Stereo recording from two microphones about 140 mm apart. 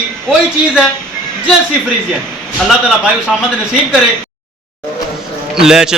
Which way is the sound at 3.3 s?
Centre (ahead or behind).